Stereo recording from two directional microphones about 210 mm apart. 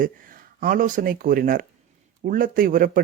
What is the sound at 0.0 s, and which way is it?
Speech, 40° right (ahead or behind).